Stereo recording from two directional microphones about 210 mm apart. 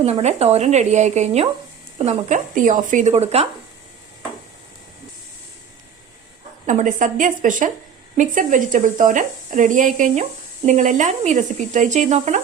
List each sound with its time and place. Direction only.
0.0 s speech: 30° right (ahead or behind)
6.7 s speech: 35° right (ahead or behind)